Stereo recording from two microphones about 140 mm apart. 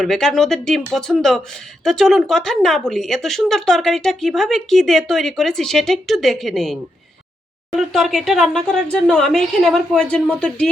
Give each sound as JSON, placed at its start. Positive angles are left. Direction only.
{"t": 0.0, "sound": "speech", "side_deg": 5}